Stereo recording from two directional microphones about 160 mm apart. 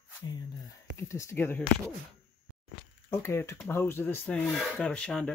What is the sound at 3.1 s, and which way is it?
Speech, 15° left (ahead or behind).